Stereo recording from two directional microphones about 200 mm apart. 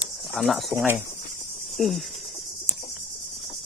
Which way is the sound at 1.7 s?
Centre (ahead or behind).